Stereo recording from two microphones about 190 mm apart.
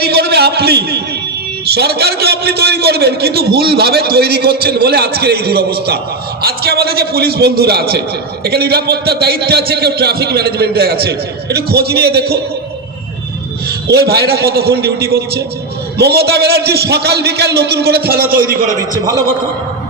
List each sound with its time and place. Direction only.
0.0 s a sound: 60° right (ahead or behind)
1.7 s a man's voice: 55° right (ahead or behind)
13.7 s a man's voice: 60° right (ahead or behind)